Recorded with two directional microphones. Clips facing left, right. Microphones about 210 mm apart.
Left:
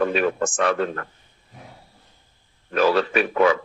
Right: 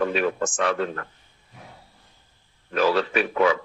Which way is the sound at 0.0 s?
50° left (ahead or behind).